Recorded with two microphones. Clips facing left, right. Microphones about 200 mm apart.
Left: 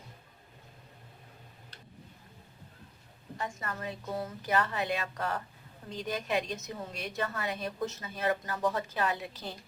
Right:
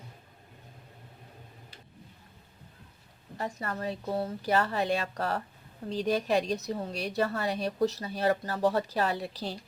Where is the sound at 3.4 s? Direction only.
35° right (ahead or behind).